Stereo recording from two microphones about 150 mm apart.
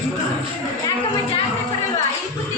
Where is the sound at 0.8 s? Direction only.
30° left (ahead or behind).